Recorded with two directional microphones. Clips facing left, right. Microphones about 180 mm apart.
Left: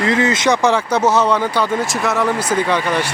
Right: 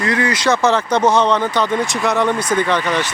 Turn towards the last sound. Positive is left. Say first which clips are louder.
# even
turn(degrees=10)  # may be behind; listen again after turning